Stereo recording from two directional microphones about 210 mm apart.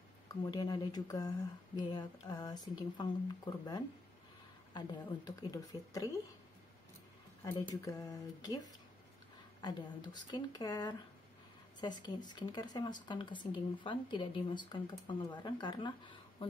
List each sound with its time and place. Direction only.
0.3 s a woman's voice: 20° left (ahead or behind)
7.4 s a woman's voice: 15° left (ahead or behind)